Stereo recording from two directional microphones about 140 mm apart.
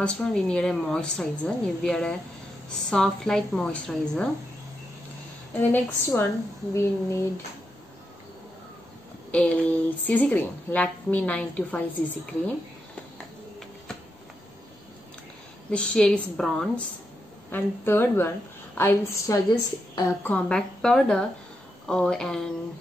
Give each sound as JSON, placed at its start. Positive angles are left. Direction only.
{"t": 0.0, "sound": "a woman's voice", "side_deg": 5}
{"t": 5.6, "sound": "a woman's voice", "side_deg": 15}
{"t": 9.3, "sound": "a woman's voice", "side_deg": 10}
{"t": 15.7, "sound": "a woman's voice", "side_deg": 5}
{"t": 17.5, "sound": "a woman's voice", "side_deg": 15}